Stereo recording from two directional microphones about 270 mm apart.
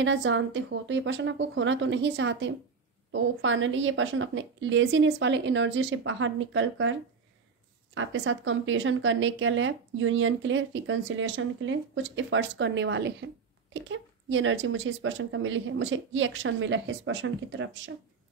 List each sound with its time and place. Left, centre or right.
0.0 s a woman's voice: right